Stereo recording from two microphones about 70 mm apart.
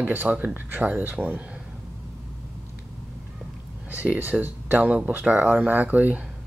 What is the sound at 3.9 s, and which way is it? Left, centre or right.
Speech, right.